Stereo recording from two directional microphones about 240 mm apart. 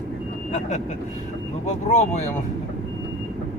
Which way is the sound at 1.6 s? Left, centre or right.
Left.